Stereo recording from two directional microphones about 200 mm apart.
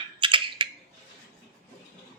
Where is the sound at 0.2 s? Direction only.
25° right (ahead or behind).